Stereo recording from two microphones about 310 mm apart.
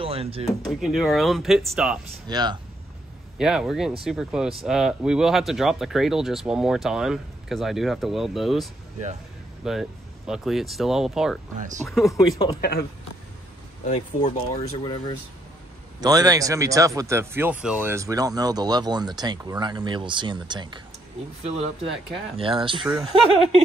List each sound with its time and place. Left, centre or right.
0.0 s speech: centre
0.5 s speech: centre
2.2 s speech: centre
3.3 s speech: centre
9.7 s speech: centre
12.5 s speech: left
13.8 s speech: left
16.0 s speech: centre
22.4 s speech: centre